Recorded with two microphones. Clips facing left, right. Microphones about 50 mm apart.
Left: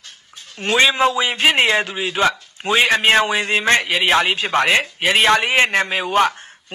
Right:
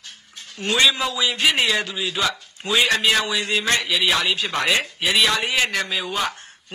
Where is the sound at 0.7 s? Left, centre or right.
Left.